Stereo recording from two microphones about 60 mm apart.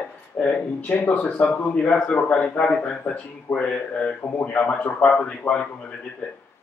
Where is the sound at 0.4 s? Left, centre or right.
Centre.